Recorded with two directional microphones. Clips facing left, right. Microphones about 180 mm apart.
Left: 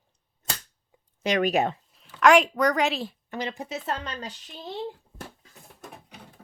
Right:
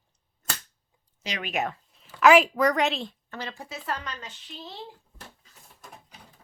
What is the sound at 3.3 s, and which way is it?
Speech, 15° left (ahead or behind).